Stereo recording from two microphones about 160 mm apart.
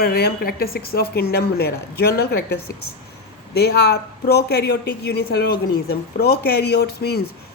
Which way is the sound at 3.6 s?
85° left.